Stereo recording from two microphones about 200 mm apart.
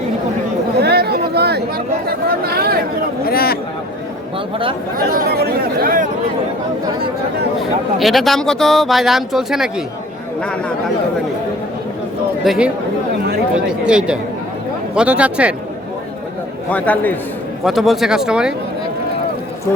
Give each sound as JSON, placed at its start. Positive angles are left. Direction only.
{"t": 0.8, "sound": "chatter", "side_deg": -55}
{"t": 3.2, "sound": "speech", "side_deg": 50}
{"t": 4.9, "sound": "speech", "side_deg": -50}
{"t": 7.9, "sound": "speech", "side_deg": 0}
{"t": 12.5, "sound": "speech", "side_deg": -5}
{"t": 16.6, "sound": "a man's voice", "side_deg": 5}